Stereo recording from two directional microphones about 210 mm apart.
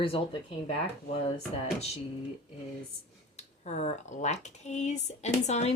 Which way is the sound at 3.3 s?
35° left (ahead or behind).